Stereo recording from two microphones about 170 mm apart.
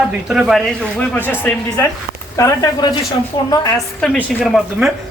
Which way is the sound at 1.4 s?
20° left (ahead or behind).